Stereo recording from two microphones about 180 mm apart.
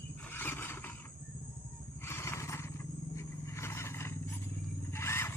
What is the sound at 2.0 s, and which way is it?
Vehicle, 15° left (ahead or behind).